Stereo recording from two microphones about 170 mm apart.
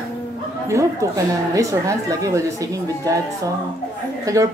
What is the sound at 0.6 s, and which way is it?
A woman's voice, 15° right (ahead or behind).